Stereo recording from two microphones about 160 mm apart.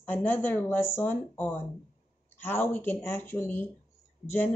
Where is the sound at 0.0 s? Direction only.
10° left (ahead or behind).